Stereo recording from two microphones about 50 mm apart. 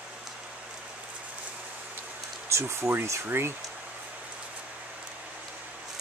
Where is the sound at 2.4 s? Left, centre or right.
Right.